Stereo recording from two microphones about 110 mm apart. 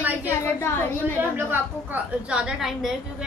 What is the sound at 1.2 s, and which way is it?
Speech, 20° right (ahead or behind).